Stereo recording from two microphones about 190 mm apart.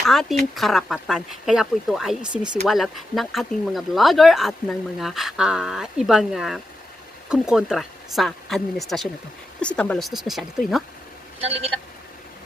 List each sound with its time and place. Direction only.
0.0 s speech: centre (ahead or behind)
11.3 s speech: 30° right (ahead or behind)